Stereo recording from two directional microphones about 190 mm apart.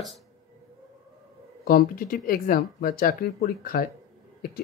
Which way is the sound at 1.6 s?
50° left (ahead or behind).